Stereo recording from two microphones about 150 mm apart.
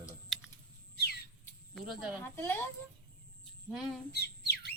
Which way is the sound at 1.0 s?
90° left.